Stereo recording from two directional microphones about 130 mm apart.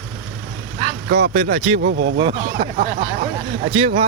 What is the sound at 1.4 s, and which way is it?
Speech, 60° right (ahead or behind).